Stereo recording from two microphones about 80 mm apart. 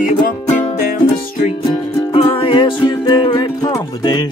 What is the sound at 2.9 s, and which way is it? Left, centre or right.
Music, left.